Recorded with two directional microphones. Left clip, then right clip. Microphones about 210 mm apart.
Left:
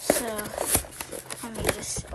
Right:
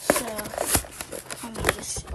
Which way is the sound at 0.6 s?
Centre (ahead or behind).